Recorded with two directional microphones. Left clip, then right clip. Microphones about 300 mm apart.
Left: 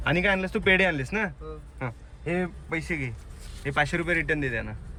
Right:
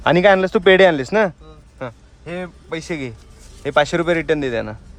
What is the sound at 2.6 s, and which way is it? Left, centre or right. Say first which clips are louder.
Speech: right 5 dB; centre.